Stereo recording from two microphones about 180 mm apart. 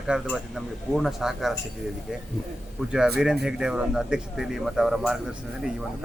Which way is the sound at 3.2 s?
5° right (ahead or behind).